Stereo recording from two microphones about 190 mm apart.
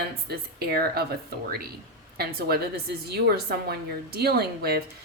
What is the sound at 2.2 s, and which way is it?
Speech, 55° right (ahead or behind).